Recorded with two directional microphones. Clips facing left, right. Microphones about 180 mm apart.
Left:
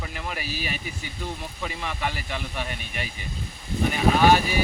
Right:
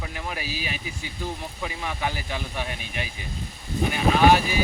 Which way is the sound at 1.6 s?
5° right (ahead or behind).